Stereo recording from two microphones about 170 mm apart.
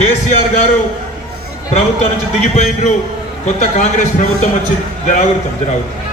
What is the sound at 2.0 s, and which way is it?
A man's voice, 45° left (ahead or behind).